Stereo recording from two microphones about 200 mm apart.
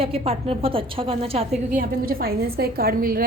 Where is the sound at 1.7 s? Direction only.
50° right (ahead or behind).